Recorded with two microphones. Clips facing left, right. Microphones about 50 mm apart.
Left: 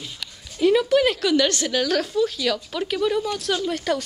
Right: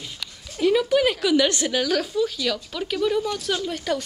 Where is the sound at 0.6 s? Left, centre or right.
Centre.